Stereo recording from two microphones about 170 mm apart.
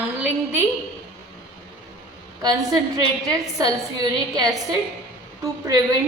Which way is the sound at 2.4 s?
20° right (ahead or behind).